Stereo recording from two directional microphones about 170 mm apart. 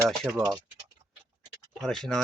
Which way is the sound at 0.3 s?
20° right (ahead or behind).